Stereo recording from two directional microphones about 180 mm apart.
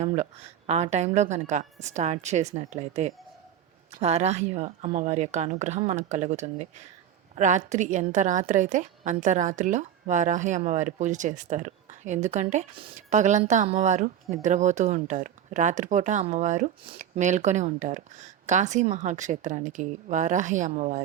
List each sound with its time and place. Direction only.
0.0 s a woman's voice: 35° right (ahead or behind)